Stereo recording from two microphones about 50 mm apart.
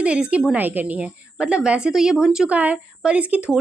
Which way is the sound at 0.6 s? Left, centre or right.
Right.